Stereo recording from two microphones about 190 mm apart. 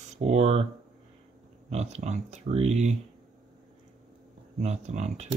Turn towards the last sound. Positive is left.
turn(degrees=-35)  # may be behind; listen again after turning